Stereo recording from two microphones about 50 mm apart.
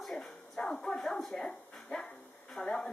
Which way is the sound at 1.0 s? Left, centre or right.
Centre.